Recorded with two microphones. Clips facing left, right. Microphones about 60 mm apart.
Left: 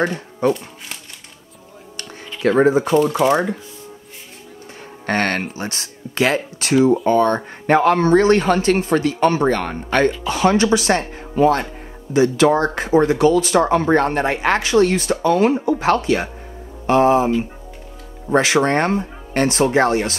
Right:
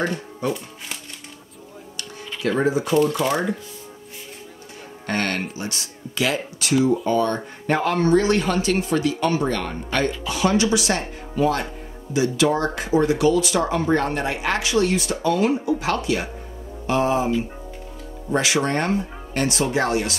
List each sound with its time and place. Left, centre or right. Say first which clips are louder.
0.4 s speech: left 8 dB; left
2.0 s music: left 3 dB; left
2.9 s speech: left 4 dB; left
5.0 s speech: left 5 dB; left